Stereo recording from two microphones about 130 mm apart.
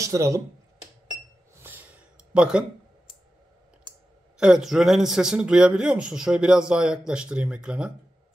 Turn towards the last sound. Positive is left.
turn(degrees=-10)  # may be behind; listen again after turning